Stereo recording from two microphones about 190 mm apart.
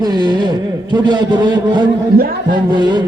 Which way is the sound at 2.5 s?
25° right (ahead or behind).